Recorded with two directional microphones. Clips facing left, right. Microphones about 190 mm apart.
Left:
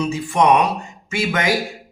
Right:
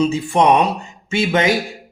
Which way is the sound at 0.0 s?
25° right (ahead or behind).